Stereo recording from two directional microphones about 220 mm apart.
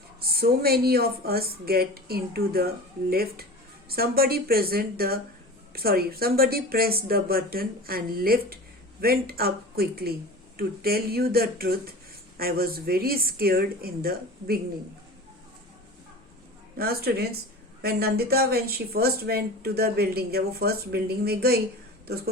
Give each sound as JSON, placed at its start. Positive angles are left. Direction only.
{"t": 0.2, "sound": "speech", "side_deg": -45}
{"t": 16.7, "sound": "speech", "side_deg": -45}